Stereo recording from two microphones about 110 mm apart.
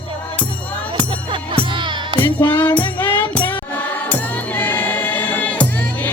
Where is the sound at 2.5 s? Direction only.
15° left (ahead or behind).